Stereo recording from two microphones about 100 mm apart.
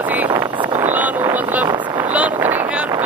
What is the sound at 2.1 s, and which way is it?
Boat, 15° right (ahead or behind).